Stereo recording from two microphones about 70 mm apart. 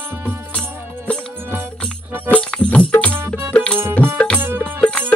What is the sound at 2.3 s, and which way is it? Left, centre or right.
Music, centre.